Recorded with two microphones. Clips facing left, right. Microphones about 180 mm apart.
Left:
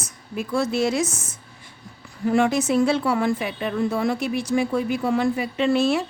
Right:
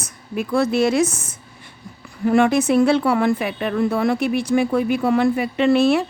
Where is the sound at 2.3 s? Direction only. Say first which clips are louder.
Right 4 dB; 60° right (ahead or behind).